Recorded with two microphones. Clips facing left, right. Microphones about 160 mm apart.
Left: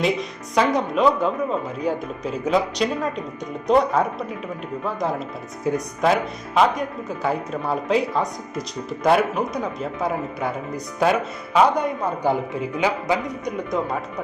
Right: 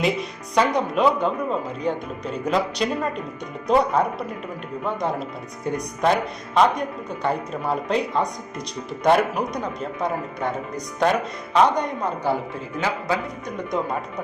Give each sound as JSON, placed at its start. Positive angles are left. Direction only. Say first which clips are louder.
{"t": 0.0, "sound": "speech", "louder": "left 1 dB", "side_deg": 0}
{"t": 13.7, "sound": "speech", "louder": "even", "side_deg": 0}